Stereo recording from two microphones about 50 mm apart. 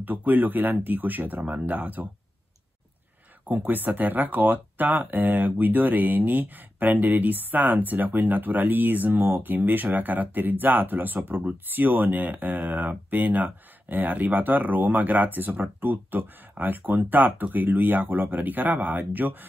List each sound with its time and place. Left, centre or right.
0.0 s speech: right
3.4 s speech: right